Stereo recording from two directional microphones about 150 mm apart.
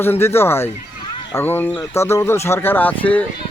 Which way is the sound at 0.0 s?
15° left (ahead or behind).